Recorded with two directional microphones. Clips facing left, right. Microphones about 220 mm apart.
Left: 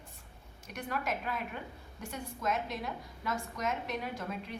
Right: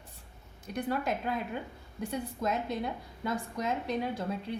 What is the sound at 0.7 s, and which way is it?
A woman's voice, 35° right (ahead or behind).